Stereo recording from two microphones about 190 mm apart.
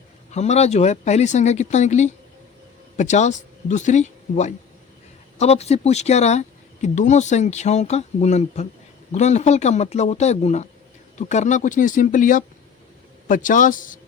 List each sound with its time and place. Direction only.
0.3 s speech: 35° left (ahead or behind)